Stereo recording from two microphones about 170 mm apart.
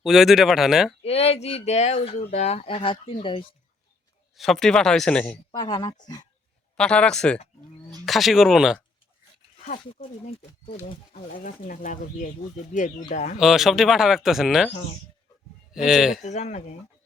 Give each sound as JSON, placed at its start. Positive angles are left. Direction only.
{"t": 0.0, "sound": "speech", "side_deg": 0}
{"t": 1.0, "sound": "speech", "side_deg": 35}
{"t": 4.4, "sound": "speech", "side_deg": 0}
{"t": 5.5, "sound": "speech", "side_deg": 25}
{"t": 6.7, "sound": "speech", "side_deg": 5}
{"t": 11.3, "sound": "speech", "side_deg": 50}
{"t": 13.4, "sound": "speech", "side_deg": 0}
{"t": 15.7, "sound": "speech", "side_deg": 0}
{"t": 16.2, "sound": "speech", "side_deg": 45}